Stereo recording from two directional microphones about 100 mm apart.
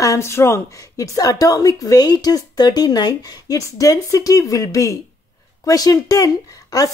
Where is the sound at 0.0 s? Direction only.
30° left (ahead or behind).